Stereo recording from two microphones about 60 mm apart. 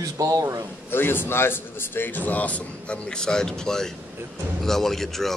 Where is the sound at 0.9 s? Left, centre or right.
Left.